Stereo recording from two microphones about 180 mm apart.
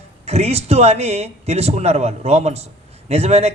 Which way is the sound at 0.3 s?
35° right (ahead or behind).